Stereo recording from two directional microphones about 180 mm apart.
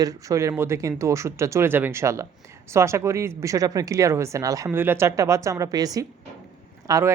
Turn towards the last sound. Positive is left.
turn(degrees=-15)  # may be behind; listen again after turning